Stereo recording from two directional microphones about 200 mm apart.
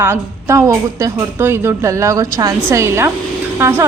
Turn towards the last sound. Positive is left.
turn(degrees=-10)  # may be behind; listen again after turning